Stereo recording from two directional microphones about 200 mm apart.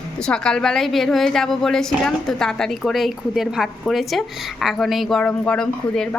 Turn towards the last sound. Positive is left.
turn(degrees=5)  # may be behind; listen again after turning